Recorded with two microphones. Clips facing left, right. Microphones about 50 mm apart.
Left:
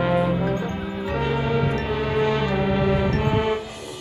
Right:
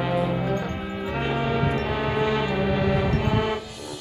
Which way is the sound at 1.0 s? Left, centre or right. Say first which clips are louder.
Left 2 dB; centre.